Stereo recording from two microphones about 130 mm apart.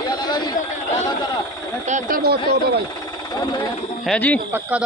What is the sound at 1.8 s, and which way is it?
Speech, 65° right (ahead or behind).